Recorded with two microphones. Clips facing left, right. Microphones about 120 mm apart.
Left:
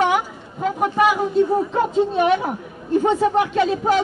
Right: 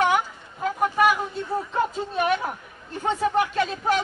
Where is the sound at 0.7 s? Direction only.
15° left (ahead or behind).